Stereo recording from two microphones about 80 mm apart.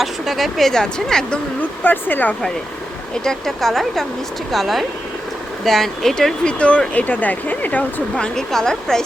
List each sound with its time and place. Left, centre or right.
0.0 s a woman's voice: centre
1.8 s speech: left
3.2 s a woman's voice: centre